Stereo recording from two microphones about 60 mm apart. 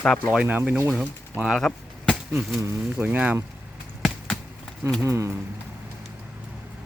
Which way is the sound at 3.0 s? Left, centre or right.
Right.